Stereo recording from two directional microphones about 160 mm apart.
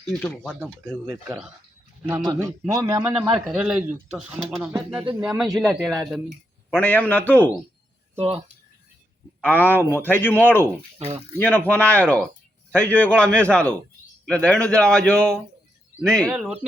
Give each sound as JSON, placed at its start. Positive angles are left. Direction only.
{"t": 2.0, "sound": "a man's voice", "side_deg": -15}
{"t": 3.3, "sound": "a man's voice", "side_deg": 0}
{"t": 6.7, "sound": "speech", "side_deg": 10}
{"t": 8.2, "sound": "speech", "side_deg": -35}
{"t": 9.4, "sound": "speech", "side_deg": 10}
{"t": 10.9, "sound": "speech", "side_deg": -35}
{"t": 11.3, "sound": "a man's voice", "side_deg": 10}
{"t": 16.3, "sound": "a man's voice", "side_deg": -10}